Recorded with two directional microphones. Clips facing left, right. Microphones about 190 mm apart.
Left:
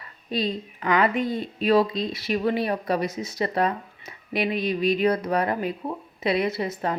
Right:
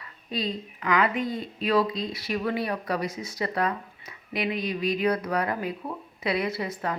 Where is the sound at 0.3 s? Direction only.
25° left (ahead or behind).